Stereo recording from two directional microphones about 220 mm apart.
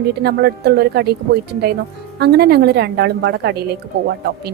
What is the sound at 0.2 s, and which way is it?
A woman's voice, 45° right (ahead or behind).